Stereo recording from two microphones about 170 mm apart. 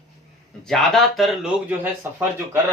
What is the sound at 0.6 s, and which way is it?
Speech, 5° left (ahead or behind).